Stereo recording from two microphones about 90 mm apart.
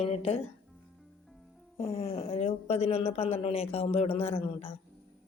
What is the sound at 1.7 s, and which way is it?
Speech, 90° left.